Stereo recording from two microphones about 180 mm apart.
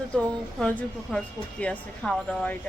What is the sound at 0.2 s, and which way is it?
Speech, 10° left (ahead or behind).